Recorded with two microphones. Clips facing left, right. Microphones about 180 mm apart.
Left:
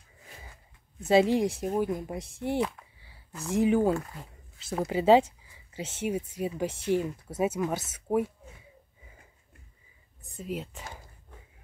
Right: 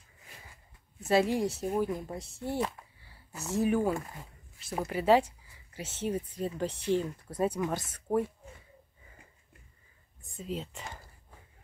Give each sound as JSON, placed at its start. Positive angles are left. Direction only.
{"t": 1.0, "sound": "speech", "side_deg": 20}
{"t": 5.8, "sound": "speech", "side_deg": 10}
{"t": 10.3, "sound": "speech", "side_deg": 5}